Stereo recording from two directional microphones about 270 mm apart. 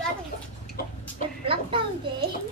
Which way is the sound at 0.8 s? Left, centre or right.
Left.